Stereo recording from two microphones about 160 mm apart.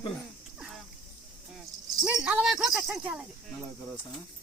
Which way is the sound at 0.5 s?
Centre (ahead or behind).